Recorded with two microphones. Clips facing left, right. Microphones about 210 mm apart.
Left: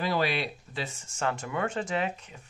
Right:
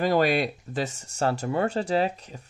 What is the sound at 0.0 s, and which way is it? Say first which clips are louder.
Speech: right 6 dB; 45° right (ahead or behind).